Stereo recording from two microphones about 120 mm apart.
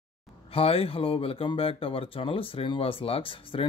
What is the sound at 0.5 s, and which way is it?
Speech, 50° left (ahead or behind).